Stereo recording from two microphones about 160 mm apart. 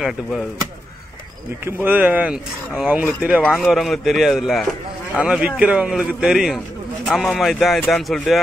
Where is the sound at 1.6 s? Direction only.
15° right (ahead or behind).